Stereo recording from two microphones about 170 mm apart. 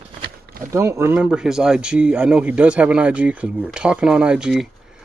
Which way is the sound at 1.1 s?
5° right (ahead or behind).